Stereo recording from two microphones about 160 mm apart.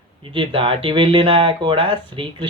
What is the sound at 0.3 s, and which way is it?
Speech, 35° right (ahead or behind).